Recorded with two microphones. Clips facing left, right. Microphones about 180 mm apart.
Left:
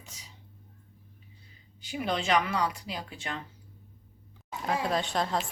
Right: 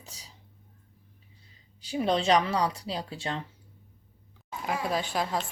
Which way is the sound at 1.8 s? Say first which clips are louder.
Right 5 dB; 35° right (ahead or behind).